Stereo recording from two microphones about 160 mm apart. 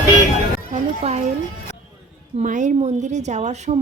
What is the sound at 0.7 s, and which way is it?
Speech, 45° right (ahead or behind).